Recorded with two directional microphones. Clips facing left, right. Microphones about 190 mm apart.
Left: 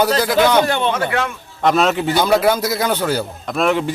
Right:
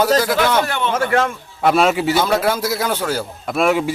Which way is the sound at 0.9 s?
45° right (ahead or behind).